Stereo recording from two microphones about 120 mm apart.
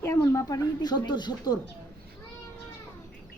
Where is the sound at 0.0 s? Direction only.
25° left (ahead or behind).